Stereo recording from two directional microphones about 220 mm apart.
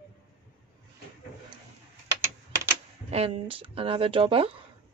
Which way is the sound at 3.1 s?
25° right (ahead or behind).